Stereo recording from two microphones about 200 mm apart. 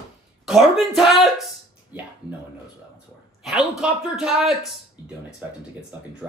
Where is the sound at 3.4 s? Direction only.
5° right (ahead or behind).